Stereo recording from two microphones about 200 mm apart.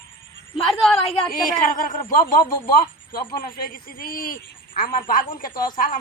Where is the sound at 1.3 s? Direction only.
45° left (ahead or behind).